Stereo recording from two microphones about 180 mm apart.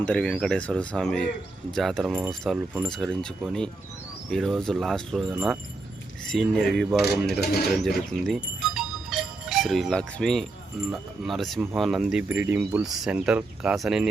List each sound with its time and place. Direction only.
0.0 s speech: 5° left (ahead or behind)
7.4 s speech: 60° left (ahead or behind)
7.7 s speech: centre (ahead or behind)
8.6 s music: 5° right (ahead or behind)
10.9 s speech: centre (ahead or behind)